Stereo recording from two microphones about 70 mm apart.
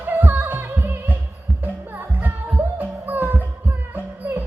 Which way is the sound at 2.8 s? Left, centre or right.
Right.